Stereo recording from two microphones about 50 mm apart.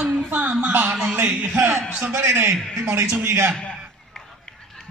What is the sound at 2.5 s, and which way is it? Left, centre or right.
Speech, right.